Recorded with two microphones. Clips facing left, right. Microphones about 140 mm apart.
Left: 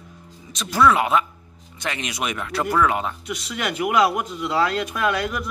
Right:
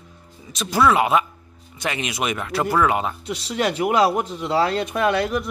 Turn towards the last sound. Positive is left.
turn(degrees=-30)  # may be behind; listen again after turning